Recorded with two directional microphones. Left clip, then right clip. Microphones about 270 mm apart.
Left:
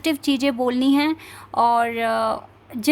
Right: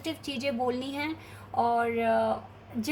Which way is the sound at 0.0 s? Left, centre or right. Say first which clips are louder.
Left 11 dB; left.